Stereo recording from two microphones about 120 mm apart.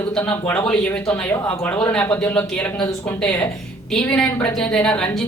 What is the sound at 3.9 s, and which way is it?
Speech, 5° left (ahead or behind).